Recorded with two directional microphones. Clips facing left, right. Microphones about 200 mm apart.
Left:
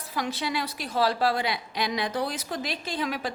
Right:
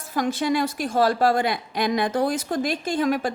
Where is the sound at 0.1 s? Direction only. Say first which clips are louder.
Right 7 dB; 50° right (ahead or behind).